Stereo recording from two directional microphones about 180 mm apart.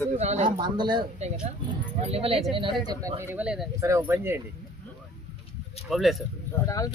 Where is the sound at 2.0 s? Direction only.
35° right (ahead or behind).